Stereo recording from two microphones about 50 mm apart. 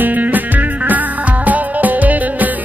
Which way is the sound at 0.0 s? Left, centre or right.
Right.